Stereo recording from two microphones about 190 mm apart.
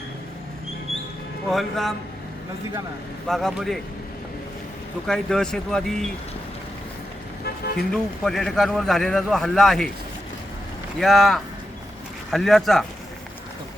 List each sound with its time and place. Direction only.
1.5 s a man's voice: centre (ahead or behind)
3.2 s a man's voice: centre (ahead or behind)
5.0 s a man's voice: 5° left (ahead or behind)
7.4 s vehicle: 55° left (ahead or behind)
7.9 s a man's voice: centre (ahead or behind)
11.0 s a man's voice: centre (ahead or behind)